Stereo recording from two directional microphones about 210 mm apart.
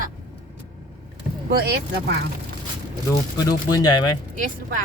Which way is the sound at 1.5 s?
50° right (ahead or behind).